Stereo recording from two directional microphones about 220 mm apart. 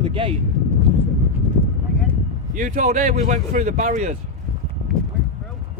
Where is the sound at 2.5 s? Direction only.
35° right (ahead or behind).